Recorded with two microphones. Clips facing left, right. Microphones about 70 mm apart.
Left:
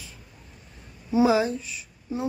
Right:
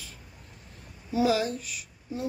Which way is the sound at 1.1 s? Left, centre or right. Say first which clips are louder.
Left 4 dB; left.